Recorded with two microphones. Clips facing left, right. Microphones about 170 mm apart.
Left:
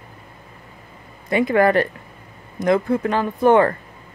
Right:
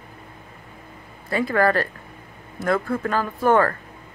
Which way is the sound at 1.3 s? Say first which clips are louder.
Left 4 dB; 20° left (ahead or behind).